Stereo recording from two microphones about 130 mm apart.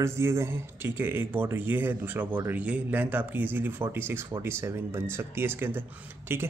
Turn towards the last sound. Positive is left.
turn(degrees=-15)  # may be behind; listen again after turning